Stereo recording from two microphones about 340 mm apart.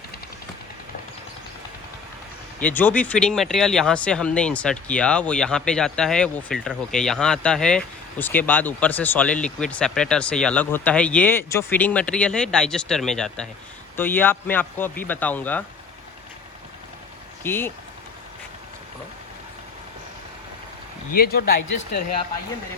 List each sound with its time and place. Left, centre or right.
2.6 s speech: centre
17.4 s speech: centre
21.1 s speech: left